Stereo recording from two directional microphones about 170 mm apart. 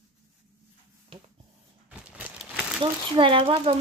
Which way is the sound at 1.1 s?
35° right (ahead or behind).